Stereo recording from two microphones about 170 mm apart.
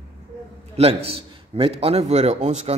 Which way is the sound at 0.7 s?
35° right (ahead or behind).